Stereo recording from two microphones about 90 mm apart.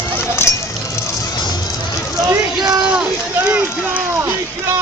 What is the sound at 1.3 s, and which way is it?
Music, 55° left (ahead or behind).